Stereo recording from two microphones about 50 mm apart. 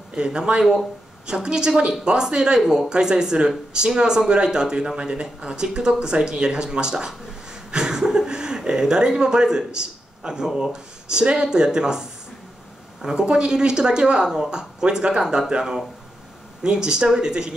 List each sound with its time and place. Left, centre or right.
0.1 s speech: centre